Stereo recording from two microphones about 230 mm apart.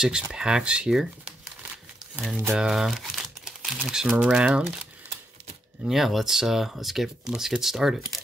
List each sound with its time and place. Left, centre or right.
0.0 s speech: centre
2.1 s speech: centre
5.9 s speech: centre